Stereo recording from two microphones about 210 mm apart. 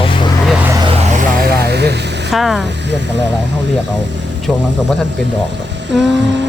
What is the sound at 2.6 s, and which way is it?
Speech, 55° right (ahead or behind).